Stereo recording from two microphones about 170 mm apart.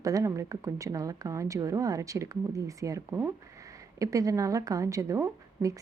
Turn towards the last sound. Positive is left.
turn(degrees=-20)  # may be behind; listen again after turning